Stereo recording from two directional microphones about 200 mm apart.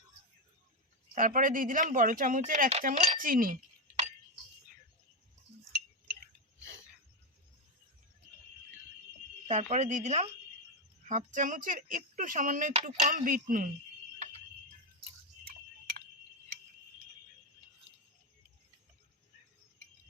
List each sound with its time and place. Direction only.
1.1 s speech: 40° right (ahead or behind)
9.5 s speech: 35° right (ahead or behind)